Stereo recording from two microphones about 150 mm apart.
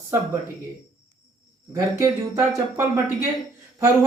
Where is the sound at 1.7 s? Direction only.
20° right (ahead or behind).